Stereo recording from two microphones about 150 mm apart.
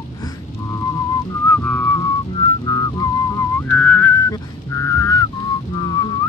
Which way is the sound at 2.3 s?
25° left (ahead or behind).